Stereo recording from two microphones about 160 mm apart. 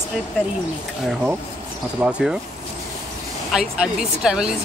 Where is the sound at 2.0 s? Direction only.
5° right (ahead or behind).